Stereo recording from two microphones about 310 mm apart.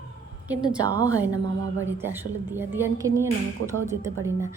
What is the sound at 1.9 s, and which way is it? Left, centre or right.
Speech, centre.